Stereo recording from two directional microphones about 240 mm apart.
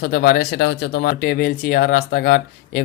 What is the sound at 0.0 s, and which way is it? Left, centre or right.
Speech, left.